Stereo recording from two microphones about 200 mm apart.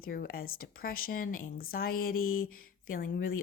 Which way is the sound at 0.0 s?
50° left (ahead or behind).